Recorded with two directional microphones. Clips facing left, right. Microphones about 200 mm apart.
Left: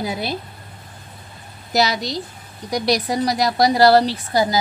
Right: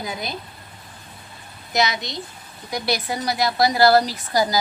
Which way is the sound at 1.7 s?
35° left (ahead or behind).